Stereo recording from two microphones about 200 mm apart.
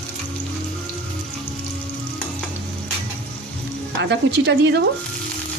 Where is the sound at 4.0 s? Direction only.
60° right (ahead or behind).